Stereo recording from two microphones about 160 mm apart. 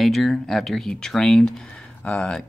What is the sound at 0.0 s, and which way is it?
Speech, centre (ahead or behind).